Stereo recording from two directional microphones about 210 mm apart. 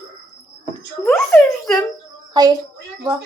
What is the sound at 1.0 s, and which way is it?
Speech, 10° left (ahead or behind).